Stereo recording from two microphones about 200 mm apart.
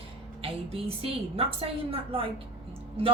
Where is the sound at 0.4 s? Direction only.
30° right (ahead or behind).